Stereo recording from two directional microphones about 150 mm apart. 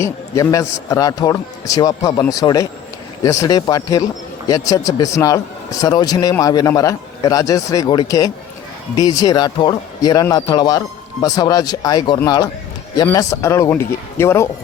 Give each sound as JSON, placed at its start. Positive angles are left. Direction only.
{"t": 0.0, "sound": "speech", "side_deg": 20}